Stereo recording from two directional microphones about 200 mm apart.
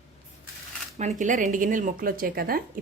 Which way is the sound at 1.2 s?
40° right (ahead or behind).